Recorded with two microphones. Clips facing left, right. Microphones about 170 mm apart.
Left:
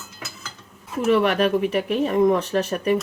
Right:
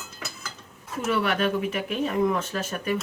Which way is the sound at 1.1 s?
40° left (ahead or behind).